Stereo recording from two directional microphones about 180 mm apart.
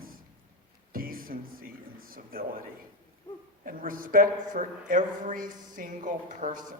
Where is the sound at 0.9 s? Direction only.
55° right (ahead or behind).